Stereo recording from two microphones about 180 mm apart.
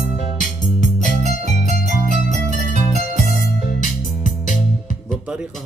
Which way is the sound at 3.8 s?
45° left (ahead or behind).